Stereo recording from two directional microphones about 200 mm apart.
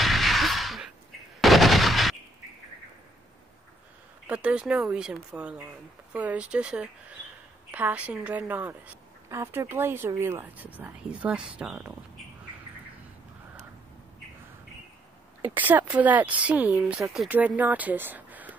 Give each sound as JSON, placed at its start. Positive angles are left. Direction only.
{"t": 0.0, "sound": "a sound", "side_deg": 0}
{"t": 1.4, "sound": "gunshot", "side_deg": 0}
{"t": 4.3, "sound": "a woman's voice", "side_deg": -5}
{"t": 15.4, "sound": "a woman's voice", "side_deg": -10}